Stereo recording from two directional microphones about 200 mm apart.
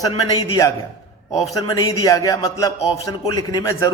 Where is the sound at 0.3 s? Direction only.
15° left (ahead or behind).